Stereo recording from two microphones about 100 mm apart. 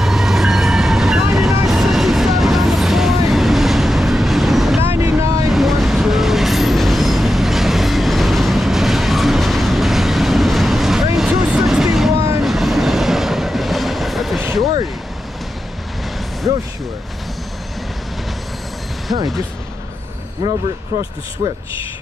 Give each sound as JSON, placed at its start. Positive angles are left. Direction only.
{"t": 0.0, "sound": "train", "side_deg": -5}
{"t": 1.7, "sound": "vehicle", "side_deg": -5}
{"t": 4.8, "sound": "boat", "side_deg": -25}
{"t": 5.5, "sound": "train", "side_deg": 0}